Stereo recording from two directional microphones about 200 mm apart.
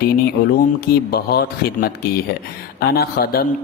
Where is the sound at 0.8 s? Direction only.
50° left (ahead or behind).